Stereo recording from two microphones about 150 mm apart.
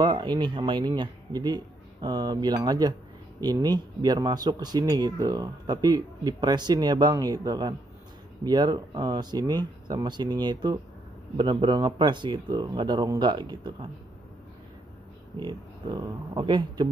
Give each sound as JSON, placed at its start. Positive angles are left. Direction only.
{"t": 0.0, "sound": "speech", "side_deg": -30}
{"t": 15.3, "sound": "speech", "side_deg": -30}